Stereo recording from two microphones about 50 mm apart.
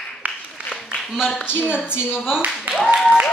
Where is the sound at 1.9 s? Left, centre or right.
Left.